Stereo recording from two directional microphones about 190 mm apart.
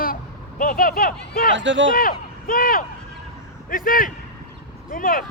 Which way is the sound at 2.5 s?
50° left (ahead or behind).